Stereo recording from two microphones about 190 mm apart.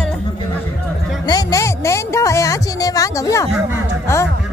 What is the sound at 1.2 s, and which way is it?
Music, 20° left (ahead or behind).